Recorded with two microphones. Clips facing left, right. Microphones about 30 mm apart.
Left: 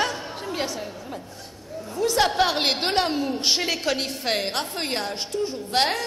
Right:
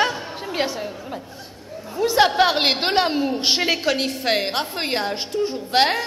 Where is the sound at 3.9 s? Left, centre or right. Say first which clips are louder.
Right 4 dB; centre.